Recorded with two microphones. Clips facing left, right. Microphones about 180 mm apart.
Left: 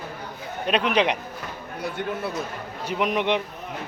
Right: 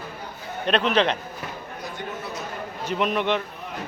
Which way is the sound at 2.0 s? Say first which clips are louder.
Left 6 dB; 60° left (ahead or behind).